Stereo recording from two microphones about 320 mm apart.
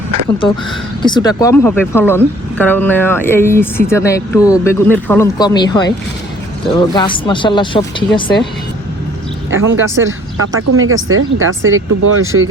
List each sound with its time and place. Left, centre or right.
1.0 s speech: centre
9.5 s speech: right